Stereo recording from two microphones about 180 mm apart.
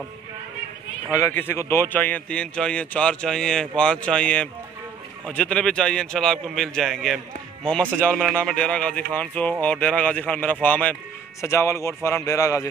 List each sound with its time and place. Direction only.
1.1 s a man's voice: 15° left (ahead or behind)